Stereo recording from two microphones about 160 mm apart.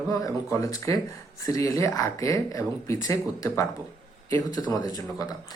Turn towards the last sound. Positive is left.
turn(degrees=25)  # may be behind; listen again after turning